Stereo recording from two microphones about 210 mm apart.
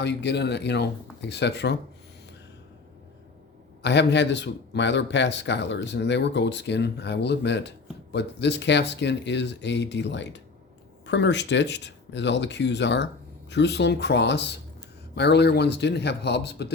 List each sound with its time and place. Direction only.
0.0 s speech: 55° left (ahead or behind)
3.8 s speech: 55° left (ahead or behind)